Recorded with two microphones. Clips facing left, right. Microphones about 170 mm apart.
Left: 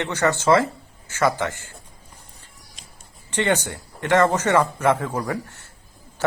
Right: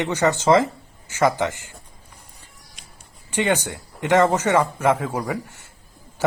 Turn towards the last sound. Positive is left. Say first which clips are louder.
# even
turn(degrees=-10)  # may be behind; listen again after turning